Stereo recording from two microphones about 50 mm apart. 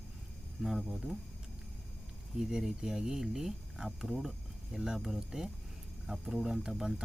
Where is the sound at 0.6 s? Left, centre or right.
Centre.